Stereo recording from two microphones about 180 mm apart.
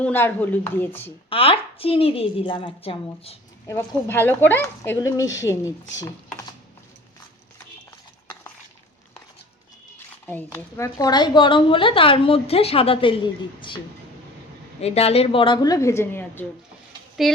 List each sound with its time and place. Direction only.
0.0 s speech: 10° left (ahead or behind)
1.3 s a woman's voice: 30° left (ahead or behind)
3.7 s speech: 10° left (ahead or behind)
10.2 s a woman's voice: 10° left (ahead or behind)
17.2 s speech: centre (ahead or behind)